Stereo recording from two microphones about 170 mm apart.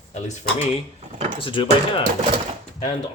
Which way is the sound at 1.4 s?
30° left (ahead or behind).